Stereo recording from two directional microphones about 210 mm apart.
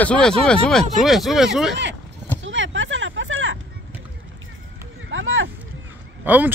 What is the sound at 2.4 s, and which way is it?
Vehicle, 65° right (ahead or behind).